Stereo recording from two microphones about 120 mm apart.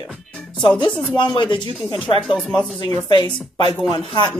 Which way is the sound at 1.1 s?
40° left (ahead or behind).